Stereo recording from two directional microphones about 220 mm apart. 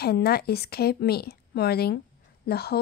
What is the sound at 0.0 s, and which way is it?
A woman's voice, 45° left (ahead or behind).